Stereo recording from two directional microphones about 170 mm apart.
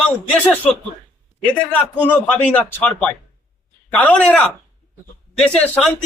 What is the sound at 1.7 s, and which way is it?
Speech, 10° left (ahead or behind).